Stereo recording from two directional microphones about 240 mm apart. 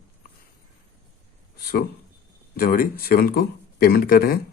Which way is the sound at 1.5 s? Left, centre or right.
Left.